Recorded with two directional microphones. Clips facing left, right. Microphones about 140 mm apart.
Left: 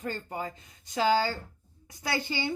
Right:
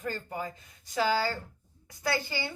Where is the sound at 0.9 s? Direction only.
20° left (ahead or behind).